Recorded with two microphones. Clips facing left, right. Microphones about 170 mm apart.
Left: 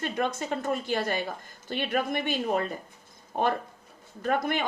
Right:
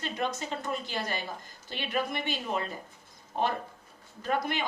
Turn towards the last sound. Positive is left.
turn(degrees=50)  # may be behind; listen again after turning